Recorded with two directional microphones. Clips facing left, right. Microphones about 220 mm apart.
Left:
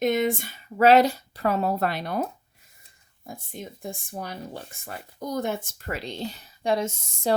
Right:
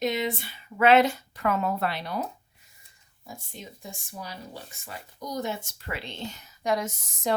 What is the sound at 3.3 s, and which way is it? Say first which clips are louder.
Speech: left 4 dB; 55° left (ahead or behind).